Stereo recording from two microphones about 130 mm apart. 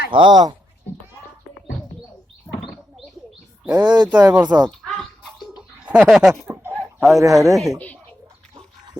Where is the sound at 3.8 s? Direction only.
35° right (ahead or behind).